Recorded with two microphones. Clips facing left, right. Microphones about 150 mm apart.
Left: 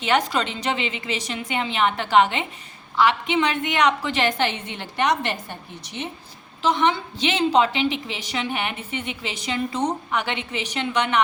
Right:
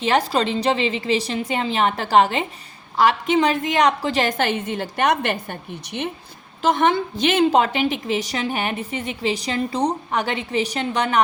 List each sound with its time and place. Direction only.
0.0 s a woman's voice: 35° right (ahead or behind)